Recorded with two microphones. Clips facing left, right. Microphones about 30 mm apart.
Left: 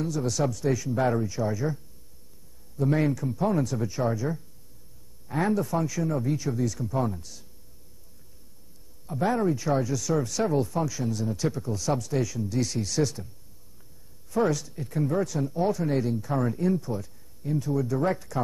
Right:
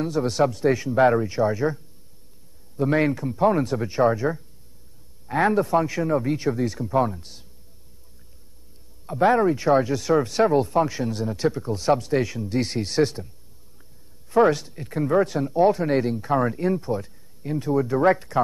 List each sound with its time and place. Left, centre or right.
0.0 s speech: right
2.9 s a man's voice: right
3.3 s speech: right
9.2 s speech: right
14.3 s speech: right